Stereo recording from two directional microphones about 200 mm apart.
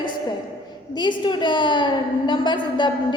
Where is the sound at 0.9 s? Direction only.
25° left (ahead or behind).